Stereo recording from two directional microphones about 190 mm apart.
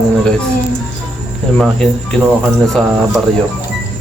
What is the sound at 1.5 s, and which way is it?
Speech, 5° left (ahead or behind).